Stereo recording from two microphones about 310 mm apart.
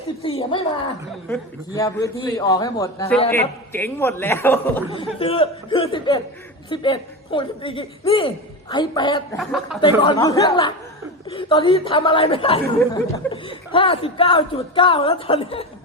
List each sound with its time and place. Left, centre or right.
0.2 s a man's voice: centre
9.4 s speech: centre
10.0 s a man's voice: centre